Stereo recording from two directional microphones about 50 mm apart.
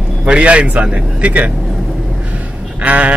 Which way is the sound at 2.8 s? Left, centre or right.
Right.